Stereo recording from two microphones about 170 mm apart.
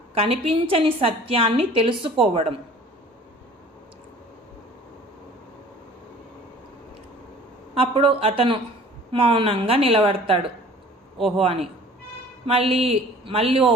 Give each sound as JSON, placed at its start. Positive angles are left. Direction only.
{"t": 0.1, "sound": "a woman's voice", "side_deg": -35}
{"t": 7.8, "sound": "a woman's voice", "side_deg": -35}